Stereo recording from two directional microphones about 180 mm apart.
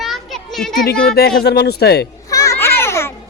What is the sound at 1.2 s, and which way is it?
Speech, 65° left (ahead or behind).